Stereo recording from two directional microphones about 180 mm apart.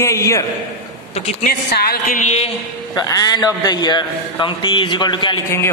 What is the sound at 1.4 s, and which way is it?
A woman's voice, 60° left (ahead or behind).